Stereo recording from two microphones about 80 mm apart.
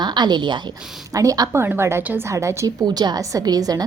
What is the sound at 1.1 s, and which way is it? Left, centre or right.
Speech, right.